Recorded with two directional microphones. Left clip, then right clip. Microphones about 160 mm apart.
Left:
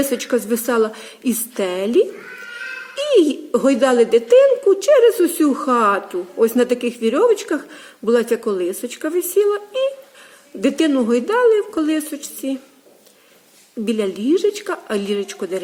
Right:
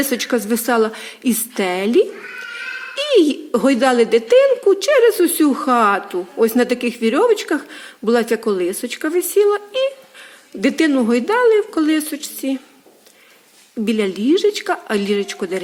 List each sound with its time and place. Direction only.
0.0 s a woman's voice: 20° right (ahead or behind)
13.8 s a woman's voice: 20° right (ahead or behind)